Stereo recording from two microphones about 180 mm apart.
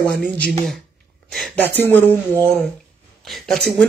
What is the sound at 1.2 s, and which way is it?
Speech, centre (ahead or behind).